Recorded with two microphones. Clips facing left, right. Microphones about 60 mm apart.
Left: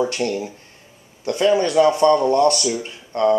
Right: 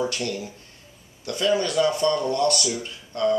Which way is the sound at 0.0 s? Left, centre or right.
Left.